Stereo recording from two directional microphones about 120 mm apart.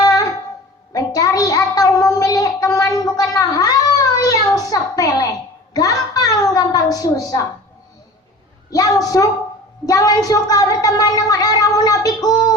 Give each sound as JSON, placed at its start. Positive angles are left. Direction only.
{"t": 0.0, "sound": "music", "side_deg": 30}
{"t": 0.9, "sound": "child singing", "side_deg": 30}
{"t": 4.2, "sound": "a child's voice", "side_deg": 30}
{"t": 8.7, "sound": "a woman's voice", "side_deg": 30}